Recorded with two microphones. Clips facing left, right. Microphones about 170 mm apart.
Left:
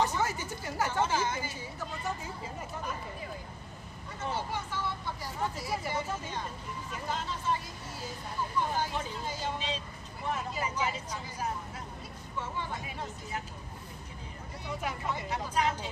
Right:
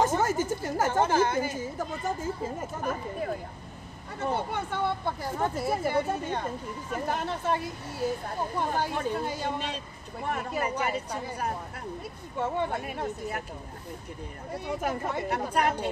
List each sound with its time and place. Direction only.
0.0 s a woman's voice: 45° right (ahead or behind)
14.5 s speech: 55° right (ahead or behind)